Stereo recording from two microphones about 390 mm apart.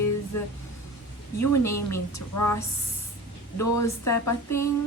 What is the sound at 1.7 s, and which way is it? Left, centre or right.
Speech, centre.